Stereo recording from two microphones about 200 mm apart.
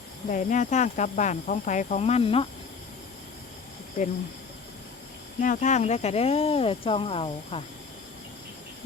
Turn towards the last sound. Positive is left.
turn(degrees=30)  # may be behind; listen again after turning